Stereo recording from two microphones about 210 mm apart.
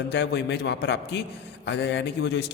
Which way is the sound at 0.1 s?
55° left (ahead or behind).